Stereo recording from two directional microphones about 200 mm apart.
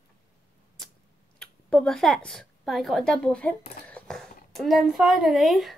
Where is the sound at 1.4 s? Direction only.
5° left (ahead or behind).